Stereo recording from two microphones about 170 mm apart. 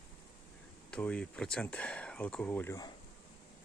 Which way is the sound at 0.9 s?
5° left (ahead or behind).